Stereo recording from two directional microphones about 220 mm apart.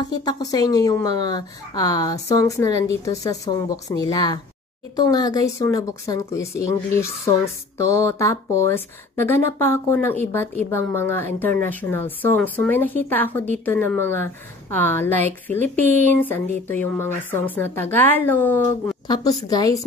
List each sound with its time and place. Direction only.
0.0 s speech: 20° left (ahead or behind)
19.0 s a woman's voice: 20° left (ahead or behind)